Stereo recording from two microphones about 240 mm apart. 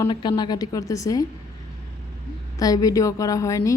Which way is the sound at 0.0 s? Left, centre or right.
Centre.